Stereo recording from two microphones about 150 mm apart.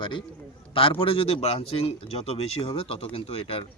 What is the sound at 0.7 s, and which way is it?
Speech, 35° left (ahead or behind).